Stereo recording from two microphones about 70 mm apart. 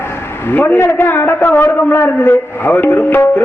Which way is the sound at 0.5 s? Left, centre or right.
Left.